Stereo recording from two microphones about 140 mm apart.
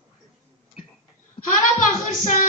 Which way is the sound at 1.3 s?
70° left (ahead or behind).